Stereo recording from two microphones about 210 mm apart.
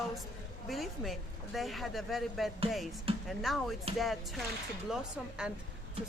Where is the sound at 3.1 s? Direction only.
25° right (ahead or behind).